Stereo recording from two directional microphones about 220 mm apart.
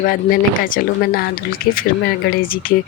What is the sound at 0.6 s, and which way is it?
Speech, 40° left (ahead or behind).